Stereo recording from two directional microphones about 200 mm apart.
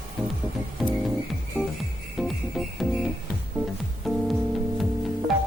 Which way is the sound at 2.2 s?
Centre (ahead or behind).